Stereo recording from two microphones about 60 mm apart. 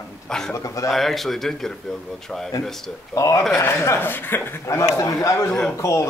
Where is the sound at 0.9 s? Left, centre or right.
Centre.